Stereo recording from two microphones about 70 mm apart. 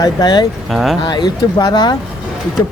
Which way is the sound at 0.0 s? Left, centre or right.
Left.